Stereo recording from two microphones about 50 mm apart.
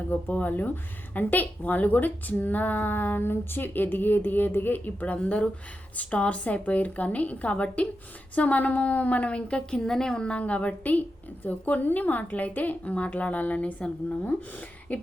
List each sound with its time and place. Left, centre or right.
0.1 s a woman's voice: left